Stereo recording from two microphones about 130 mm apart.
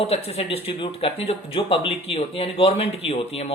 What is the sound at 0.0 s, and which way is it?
Speech, 50° left (ahead or behind).